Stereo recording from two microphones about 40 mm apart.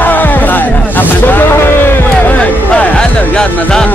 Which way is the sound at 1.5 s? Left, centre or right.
Left.